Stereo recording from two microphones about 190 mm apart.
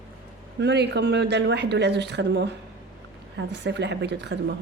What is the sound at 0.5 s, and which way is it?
A woman's voice, 60° right (ahead or behind).